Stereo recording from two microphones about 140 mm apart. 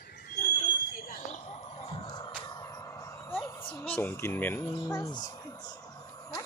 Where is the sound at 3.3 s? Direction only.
15° left (ahead or behind).